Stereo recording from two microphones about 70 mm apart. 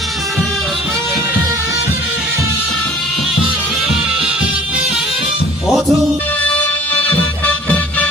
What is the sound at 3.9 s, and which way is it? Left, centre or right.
Music, centre.